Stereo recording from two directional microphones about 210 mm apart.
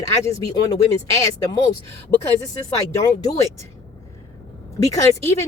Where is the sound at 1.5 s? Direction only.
15° left (ahead or behind).